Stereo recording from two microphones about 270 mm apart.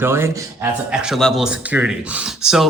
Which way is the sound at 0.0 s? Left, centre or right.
Centre.